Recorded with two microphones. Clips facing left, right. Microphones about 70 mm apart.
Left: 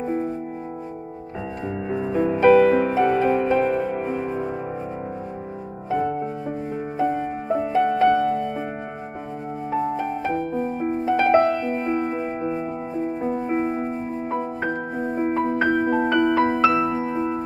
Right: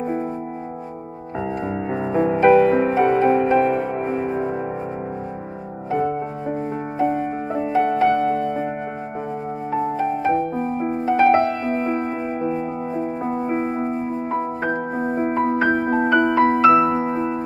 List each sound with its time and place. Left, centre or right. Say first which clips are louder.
0.0 s music: right 1 dB; centre
1.9 s music: right 2 dB; right
5.9 s music: right 1 dB; centre
9.7 s music: right 2 dB; centre
12.4 s music: right 3 dB; centre
13.2 s music: right 1 dB; right
13.5 s music: right 1 dB; centre
16.5 s music: right 5 dB; right